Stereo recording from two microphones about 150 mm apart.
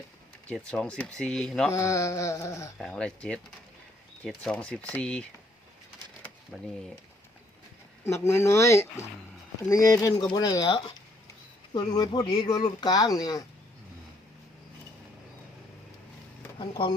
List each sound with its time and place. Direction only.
0.4 s speech: 5° left (ahead or behind)
1.7 s speech: 20° left (ahead or behind)
2.7 s speech: 5° left (ahead or behind)
6.5 s speech: 5° left (ahead or behind)
8.0 s speech: 20° left (ahead or behind)
16.6 s speech: 35° left (ahead or behind)